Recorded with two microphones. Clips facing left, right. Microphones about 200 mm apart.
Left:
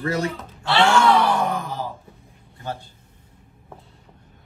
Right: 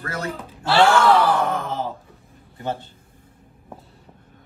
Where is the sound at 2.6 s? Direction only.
20° right (ahead or behind).